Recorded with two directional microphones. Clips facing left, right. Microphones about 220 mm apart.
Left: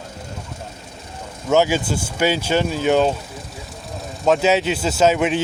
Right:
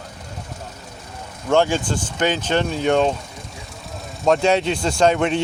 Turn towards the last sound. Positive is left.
turn(degrees=5)  # may be behind; listen again after turning